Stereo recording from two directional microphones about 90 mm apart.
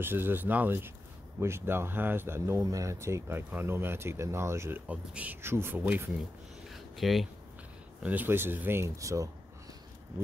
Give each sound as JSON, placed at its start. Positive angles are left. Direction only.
{"t": 0.0, "sound": "speech", "side_deg": -25}
{"t": 4.8, "sound": "speech", "side_deg": -15}
{"t": 6.7, "sound": "a sound", "side_deg": 0}
{"t": 8.0, "sound": "speech", "side_deg": -20}